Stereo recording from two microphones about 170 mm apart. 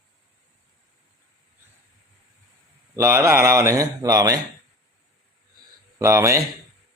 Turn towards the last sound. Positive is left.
turn(degrees=-15)  # may be behind; listen again after turning